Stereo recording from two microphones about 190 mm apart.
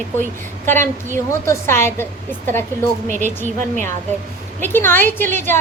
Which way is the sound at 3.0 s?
40° right (ahead or behind).